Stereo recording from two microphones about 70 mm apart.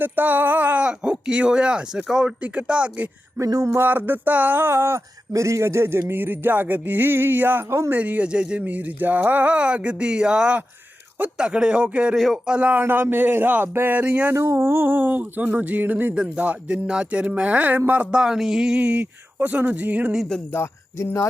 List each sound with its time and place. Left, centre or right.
0.0 s a sound: right
3.3 s a sound: right
3.8 s speech: right
7.9 s speech: right
8.6 s a sound: right
12.1 s speech: centre
12.5 s speech: centre
12.8 s speech: right
14.3 s speech: right
20.5 s speech: left